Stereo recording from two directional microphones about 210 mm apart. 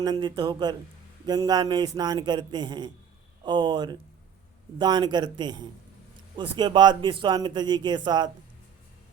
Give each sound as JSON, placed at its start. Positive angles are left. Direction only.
{"t": 0.0, "sound": "a man's voice", "side_deg": -20}